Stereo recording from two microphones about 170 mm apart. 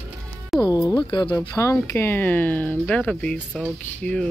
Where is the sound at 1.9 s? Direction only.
15° left (ahead or behind).